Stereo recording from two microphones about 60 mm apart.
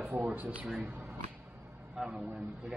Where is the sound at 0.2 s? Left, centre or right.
Right.